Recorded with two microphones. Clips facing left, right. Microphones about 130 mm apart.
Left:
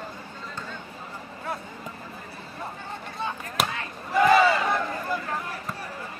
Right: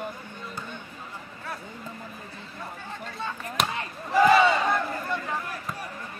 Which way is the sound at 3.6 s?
Centre (ahead or behind).